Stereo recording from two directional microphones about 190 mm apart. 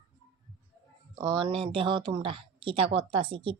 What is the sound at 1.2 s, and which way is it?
Speech, 30° right (ahead or behind).